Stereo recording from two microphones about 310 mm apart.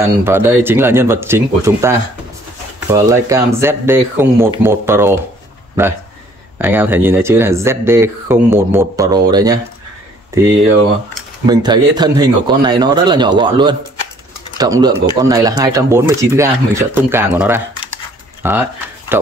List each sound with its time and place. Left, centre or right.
0.2 s speech: centre
6.6 s speech: centre